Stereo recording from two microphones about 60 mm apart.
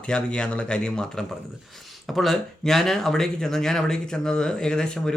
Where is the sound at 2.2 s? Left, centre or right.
Centre.